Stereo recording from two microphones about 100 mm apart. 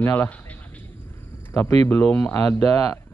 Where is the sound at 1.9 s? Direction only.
10° left (ahead or behind).